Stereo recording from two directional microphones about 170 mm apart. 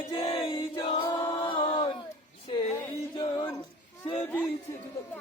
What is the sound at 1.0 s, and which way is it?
A capella, 20° left (ahead or behind).